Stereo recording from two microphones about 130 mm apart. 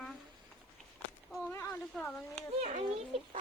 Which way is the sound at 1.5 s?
25° left (ahead or behind).